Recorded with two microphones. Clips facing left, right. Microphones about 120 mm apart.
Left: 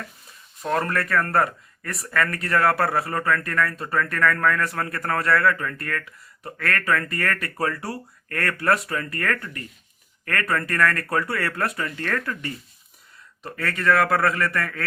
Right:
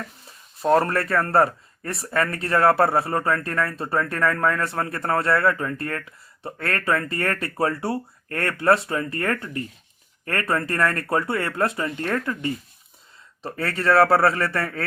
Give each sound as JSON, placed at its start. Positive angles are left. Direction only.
{"t": 0.6, "sound": "a man's voice", "side_deg": -30}